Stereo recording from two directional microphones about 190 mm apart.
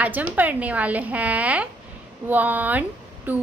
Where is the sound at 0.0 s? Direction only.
10° right (ahead or behind).